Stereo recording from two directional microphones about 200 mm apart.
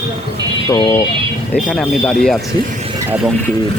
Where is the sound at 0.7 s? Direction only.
20° left (ahead or behind).